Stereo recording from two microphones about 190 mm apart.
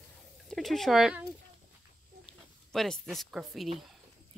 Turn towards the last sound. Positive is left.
turn(degrees=0)  # may be behind; listen again after turning